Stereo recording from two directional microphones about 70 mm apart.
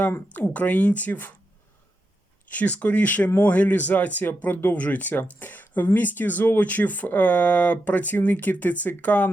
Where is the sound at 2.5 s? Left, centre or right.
Left.